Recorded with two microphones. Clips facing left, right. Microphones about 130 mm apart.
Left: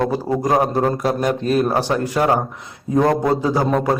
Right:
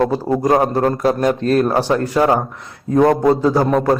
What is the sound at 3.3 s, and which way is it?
Speech, 5° left (ahead or behind).